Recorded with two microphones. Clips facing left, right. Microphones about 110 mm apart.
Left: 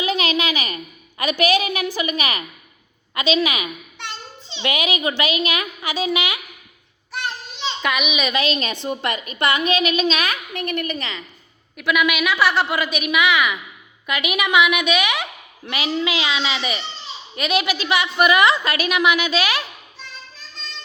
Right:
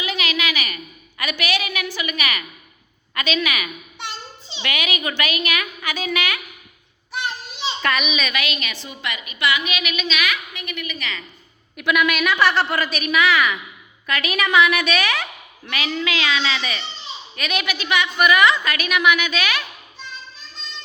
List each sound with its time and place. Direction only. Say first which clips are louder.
0.0 s a sound: left 4 dB; 35° left (ahead or behind)
1.2 s a woman's voice: left 6 dB; 35° left (ahead or behind)
7.1 s child singing: right 1 dB; centre (ahead or behind)
7.8 s a woman's voice: even; 10° left (ahead or behind); by 8.5 s 25° left (ahead or behind)
8.8 s a woman's voice: left 7 dB; 50° left (ahead or behind)
9.7 s a woman's voice: left 6 dB; 30° left (ahead or behind); by 10.9 s 50° left (ahead or behind)
10.9 s a woman's voice: left 2 dB; 25° left (ahead or behind)
11.8 s a woman's voice: even; 5° left (ahead or behind); by 19.6 s 30° left (ahead or behind)